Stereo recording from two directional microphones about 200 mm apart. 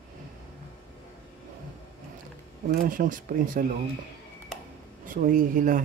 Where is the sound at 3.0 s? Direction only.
45° right (ahead or behind).